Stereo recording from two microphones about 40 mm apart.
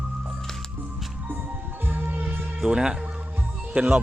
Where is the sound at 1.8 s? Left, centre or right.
Right.